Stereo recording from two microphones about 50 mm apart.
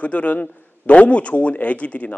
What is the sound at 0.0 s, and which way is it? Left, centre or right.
A man's voice, left.